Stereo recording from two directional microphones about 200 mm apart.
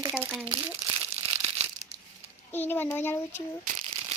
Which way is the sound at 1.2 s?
30° right (ahead or behind).